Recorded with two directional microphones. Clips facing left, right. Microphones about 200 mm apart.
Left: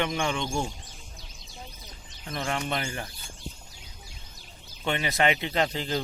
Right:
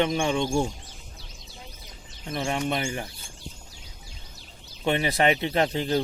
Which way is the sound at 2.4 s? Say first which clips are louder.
Right 3 dB; 15° right (ahead or behind).